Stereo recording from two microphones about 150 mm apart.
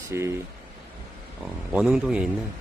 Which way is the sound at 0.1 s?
20° right (ahead or behind).